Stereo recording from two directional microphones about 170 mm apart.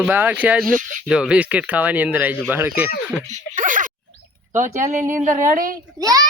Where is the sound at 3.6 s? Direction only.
50° right (ahead or behind).